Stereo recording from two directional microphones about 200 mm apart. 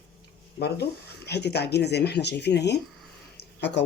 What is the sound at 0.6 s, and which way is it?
Speech, 55° left (ahead or behind).